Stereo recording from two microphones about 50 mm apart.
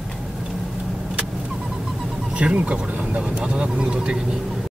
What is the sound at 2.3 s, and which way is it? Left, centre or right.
Speech, right.